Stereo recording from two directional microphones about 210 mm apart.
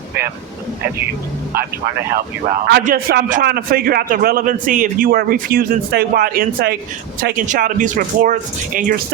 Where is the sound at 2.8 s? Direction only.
45° right (ahead or behind).